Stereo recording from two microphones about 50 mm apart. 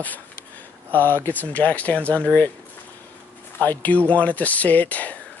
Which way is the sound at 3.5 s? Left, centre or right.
Left.